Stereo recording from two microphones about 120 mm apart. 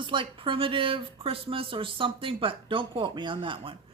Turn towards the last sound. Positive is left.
turn(degrees=-45)  # may be behind; listen again after turning